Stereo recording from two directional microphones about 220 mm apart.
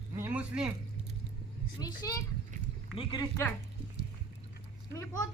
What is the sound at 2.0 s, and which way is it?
A child's voice, 15° left (ahead or behind).